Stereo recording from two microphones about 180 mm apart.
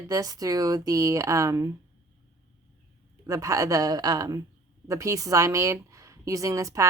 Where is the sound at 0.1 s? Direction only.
20° right (ahead or behind).